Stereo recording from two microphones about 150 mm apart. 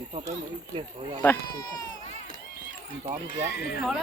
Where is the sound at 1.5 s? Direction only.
25° left (ahead or behind).